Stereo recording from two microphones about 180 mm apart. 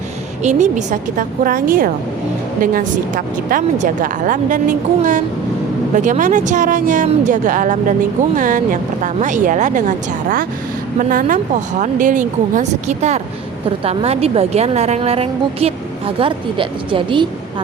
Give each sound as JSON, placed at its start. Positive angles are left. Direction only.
{"t": 0.4, "sound": "a woman's voice", "side_deg": -40}
{"t": 11.1, "sound": "a woman's voice", "side_deg": -45}